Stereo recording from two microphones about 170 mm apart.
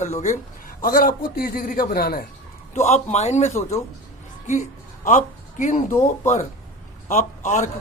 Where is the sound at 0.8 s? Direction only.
55° left (ahead or behind).